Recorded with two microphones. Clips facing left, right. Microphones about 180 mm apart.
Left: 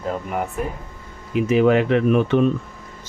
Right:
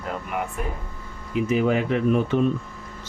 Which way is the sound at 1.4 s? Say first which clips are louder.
Left 6 dB; 80° left.